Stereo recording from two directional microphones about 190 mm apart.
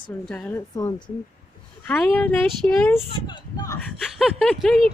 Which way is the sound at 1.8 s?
5° left (ahead or behind).